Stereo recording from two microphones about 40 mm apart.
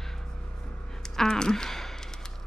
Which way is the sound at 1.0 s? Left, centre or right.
Centre.